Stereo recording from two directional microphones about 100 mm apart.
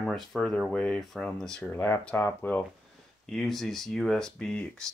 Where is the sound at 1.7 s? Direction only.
20° left (ahead or behind).